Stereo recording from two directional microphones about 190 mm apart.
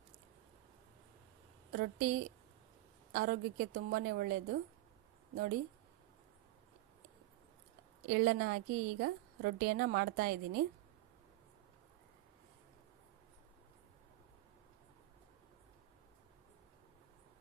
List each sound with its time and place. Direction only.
1.7 s a woman's voice: 50° right (ahead or behind)
8.0 s a woman's voice: 55° right (ahead or behind)